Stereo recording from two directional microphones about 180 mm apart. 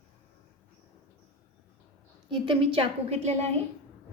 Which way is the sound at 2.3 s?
30° right (ahead or behind).